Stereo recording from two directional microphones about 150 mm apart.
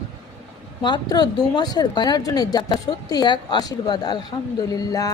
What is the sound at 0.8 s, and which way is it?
Speech, 30° left (ahead or behind).